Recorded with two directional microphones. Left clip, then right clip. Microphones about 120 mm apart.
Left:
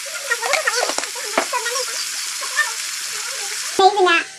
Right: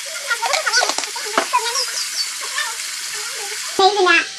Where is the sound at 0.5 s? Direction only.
40° left (ahead or behind).